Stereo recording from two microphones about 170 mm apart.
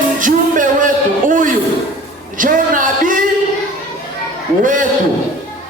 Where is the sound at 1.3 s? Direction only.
50° right (ahead or behind).